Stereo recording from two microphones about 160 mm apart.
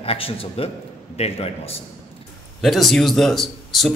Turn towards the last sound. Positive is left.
turn(degrees=0)  # may be behind; listen again after turning